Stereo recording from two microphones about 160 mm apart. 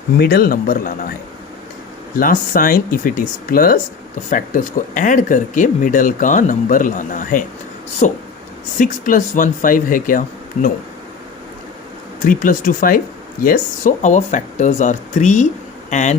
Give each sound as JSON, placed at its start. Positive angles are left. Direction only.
{"t": 0.2, "sound": "speech", "side_deg": 70}
{"t": 2.1, "sound": "speech", "side_deg": 60}
{"t": 12.2, "sound": "speech", "side_deg": 55}